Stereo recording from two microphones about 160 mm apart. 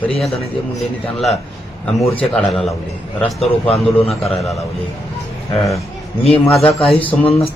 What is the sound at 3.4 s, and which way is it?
Speech, 40° left (ahead or behind).